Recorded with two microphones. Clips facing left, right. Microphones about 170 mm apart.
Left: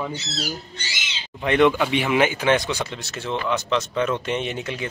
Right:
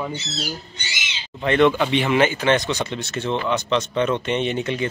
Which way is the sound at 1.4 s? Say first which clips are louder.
Right 1 dB; 10° left (ahead or behind).